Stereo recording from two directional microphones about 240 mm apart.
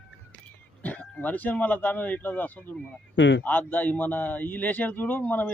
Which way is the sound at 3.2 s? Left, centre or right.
Left.